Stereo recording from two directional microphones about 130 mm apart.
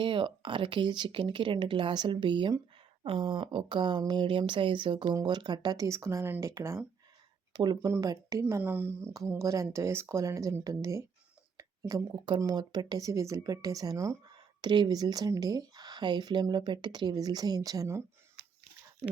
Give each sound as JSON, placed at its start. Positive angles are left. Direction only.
{"t": 0.0, "sound": "speech", "side_deg": -40}
{"t": 7.5, "sound": "speech", "side_deg": -30}